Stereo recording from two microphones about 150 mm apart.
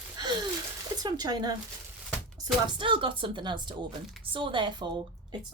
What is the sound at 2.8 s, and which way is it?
A woman's voice, 35° right (ahead or behind).